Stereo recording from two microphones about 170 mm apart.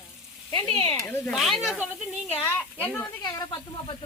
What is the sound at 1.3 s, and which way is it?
Stir, centre (ahead or behind).